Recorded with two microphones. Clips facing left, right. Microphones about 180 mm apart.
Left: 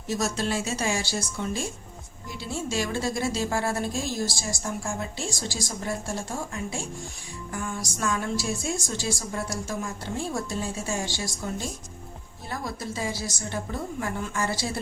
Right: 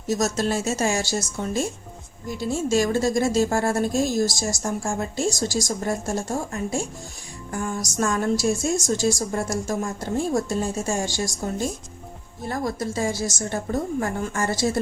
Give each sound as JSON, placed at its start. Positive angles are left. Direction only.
{"t": 0.1, "sound": "a woman's voice", "side_deg": -40}